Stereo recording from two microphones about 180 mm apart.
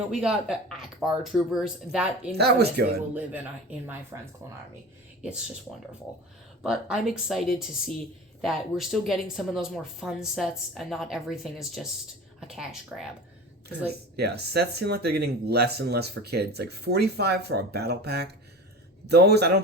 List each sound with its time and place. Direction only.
0.1 s speech: 5° right (ahead or behind)
5.2 s speech: 5° right (ahead or behind)
14.2 s speech: 65° right (ahead or behind)